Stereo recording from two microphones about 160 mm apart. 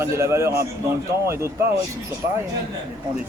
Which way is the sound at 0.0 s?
15° right (ahead or behind).